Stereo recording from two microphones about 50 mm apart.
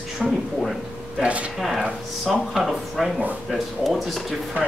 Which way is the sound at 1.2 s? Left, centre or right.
Right.